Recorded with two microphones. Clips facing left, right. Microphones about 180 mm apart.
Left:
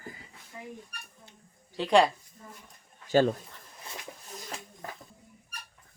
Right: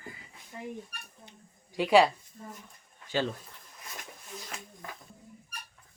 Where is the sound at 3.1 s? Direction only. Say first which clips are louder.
Left 8 dB; 45° left (ahead or behind).